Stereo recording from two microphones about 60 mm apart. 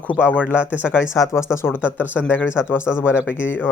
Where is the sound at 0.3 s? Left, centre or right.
Left.